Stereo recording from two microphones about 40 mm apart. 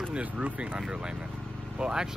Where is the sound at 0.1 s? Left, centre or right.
Right.